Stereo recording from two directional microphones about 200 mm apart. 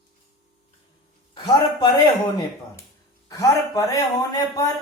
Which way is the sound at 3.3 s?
15° left (ahead or behind).